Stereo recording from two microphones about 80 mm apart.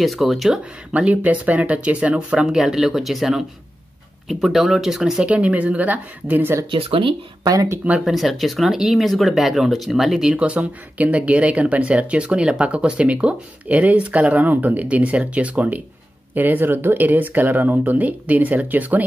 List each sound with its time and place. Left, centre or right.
0.0 s speech: centre
0.9 s speech: centre
5.3 s speech: centre
7.4 s speech: right
8.0 s speech: centre; by 19.0 s right